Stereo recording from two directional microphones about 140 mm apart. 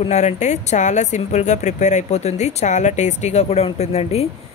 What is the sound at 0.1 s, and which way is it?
Speech, 55° left (ahead or behind).